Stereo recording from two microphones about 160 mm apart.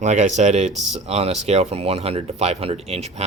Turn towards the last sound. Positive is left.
turn(degrees=-40)  # may be behind; listen again after turning